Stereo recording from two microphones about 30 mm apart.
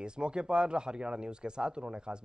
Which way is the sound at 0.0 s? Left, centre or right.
Right.